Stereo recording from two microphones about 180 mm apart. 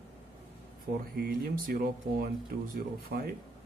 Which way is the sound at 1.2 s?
55° right (ahead or behind).